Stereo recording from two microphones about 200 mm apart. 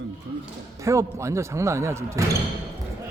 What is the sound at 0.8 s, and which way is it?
Speech, 15° right (ahead or behind).